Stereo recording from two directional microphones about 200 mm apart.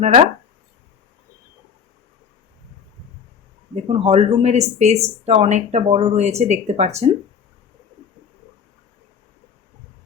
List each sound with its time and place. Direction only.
0.0 s speech: 35° right (ahead or behind)
3.8 s speech: 30° right (ahead or behind)